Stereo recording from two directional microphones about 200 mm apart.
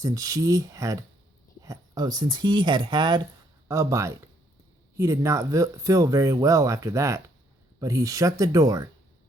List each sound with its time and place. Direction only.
0.0 s speech: 15° right (ahead or behind)